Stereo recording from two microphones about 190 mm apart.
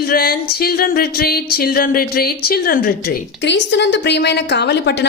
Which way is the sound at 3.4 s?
65° left (ahead or behind).